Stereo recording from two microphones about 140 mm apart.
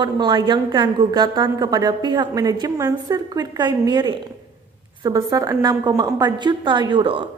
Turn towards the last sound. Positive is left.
turn(degrees=-35)  # may be behind; listen again after turning